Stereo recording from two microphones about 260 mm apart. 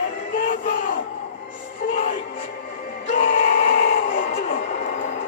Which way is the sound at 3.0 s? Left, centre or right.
Left.